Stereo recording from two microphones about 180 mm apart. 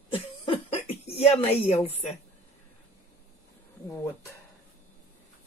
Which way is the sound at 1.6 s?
35° left (ahead or behind).